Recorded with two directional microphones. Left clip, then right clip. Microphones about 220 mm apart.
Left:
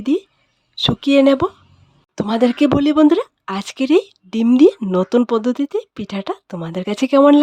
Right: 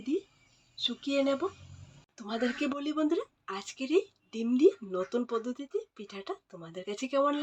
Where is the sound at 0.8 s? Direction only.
55° left (ahead or behind).